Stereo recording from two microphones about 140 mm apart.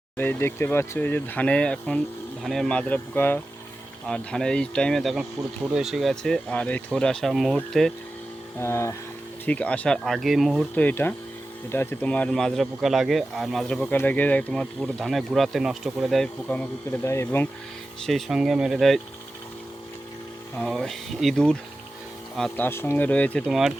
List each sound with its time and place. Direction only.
0.2 s speech: 15° left (ahead or behind)
8.5 s speech: 20° left (ahead or behind); by 10.7 s centre (ahead or behind)
10.8 s speech: 15° left (ahead or behind)
18.0 s speech: centre (ahead or behind)
20.6 s speech: 5° left (ahead or behind)
23.5 s speech: centre (ahead or behind)